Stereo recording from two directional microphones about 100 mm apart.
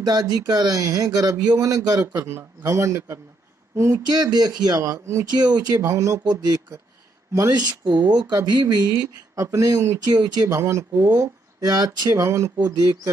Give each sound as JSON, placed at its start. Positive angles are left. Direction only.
{"t": 0.0, "sound": "speech", "side_deg": -45}
{"t": 2.0, "sound": "a man's voice", "side_deg": -25}
{"t": 4.1, "sound": "speech", "side_deg": -45}
{"t": 5.8, "sound": "a man's voice", "side_deg": -30}
{"t": 6.2, "sound": "speech", "side_deg": -45}
{"t": 10.1, "sound": "speech", "side_deg": -45}
{"t": 10.5, "sound": "a man's voice", "side_deg": -30}
{"t": 11.1, "sound": "speech", "side_deg": -40}
{"t": 12.3, "sound": "a man's voice", "side_deg": -30}
{"t": 12.5, "sound": "speech", "side_deg": -40}